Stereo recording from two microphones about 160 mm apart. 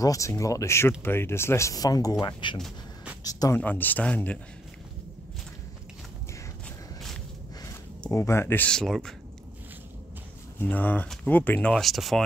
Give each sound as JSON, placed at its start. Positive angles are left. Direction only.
{"t": 0.0, "sound": "speech", "side_deg": 20}
{"t": 3.6, "sound": "speech", "side_deg": 10}
{"t": 8.1, "sound": "speech", "side_deg": 15}
{"t": 10.6, "sound": "speech", "side_deg": 10}